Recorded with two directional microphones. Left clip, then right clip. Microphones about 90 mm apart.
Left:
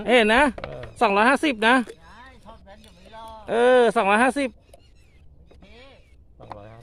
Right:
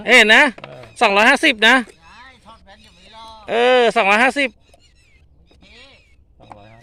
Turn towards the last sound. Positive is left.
turn(degrees=-10)  # may be behind; listen again after turning